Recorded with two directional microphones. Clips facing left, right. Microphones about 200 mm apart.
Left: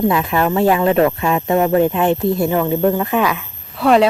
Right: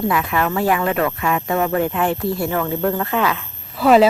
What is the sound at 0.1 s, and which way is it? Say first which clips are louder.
Speech: left 3 dB; 25° left (ahead or behind).